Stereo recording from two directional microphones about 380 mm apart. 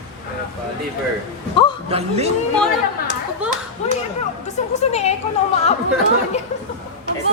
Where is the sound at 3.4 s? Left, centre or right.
Centre.